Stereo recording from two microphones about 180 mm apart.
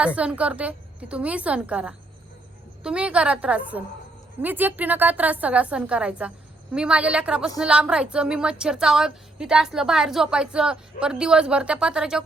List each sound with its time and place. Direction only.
0.2 s a woman's voice: 5° right (ahead or behind)